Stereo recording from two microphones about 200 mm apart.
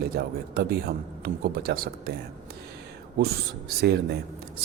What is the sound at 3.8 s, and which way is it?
Speech, 55° right (ahead or behind).